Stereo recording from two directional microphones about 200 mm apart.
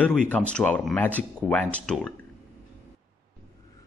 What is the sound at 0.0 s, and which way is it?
Speech, 5° left (ahead or behind).